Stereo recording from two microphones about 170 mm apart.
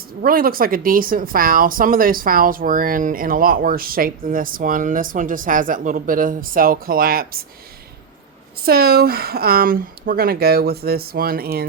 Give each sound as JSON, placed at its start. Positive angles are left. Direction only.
{"t": 0.2, "sound": "speech", "side_deg": -60}
{"t": 8.6, "sound": "speech", "side_deg": -65}